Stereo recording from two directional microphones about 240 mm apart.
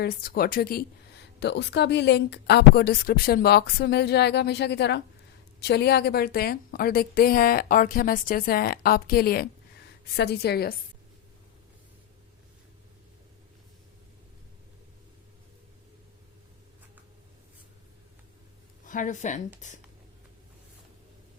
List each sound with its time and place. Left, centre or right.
0.0 s a woman's voice: left
18.9 s a woman's voice: left